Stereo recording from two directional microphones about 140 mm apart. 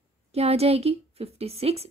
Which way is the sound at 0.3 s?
45° right (ahead or behind).